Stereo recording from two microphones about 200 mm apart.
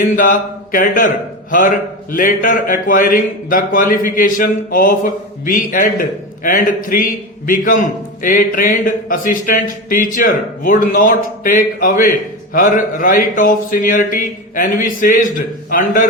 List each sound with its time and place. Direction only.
0.0 s a man's voice: 45° left (ahead or behind)